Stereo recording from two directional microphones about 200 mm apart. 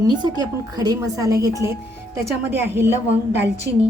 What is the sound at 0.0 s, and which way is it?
Speech, 20° right (ahead or behind).